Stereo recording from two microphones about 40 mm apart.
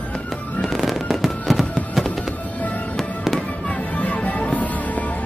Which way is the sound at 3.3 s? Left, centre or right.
Left.